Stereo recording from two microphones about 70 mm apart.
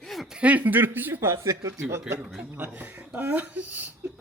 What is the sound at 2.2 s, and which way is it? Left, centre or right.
Speech, centre.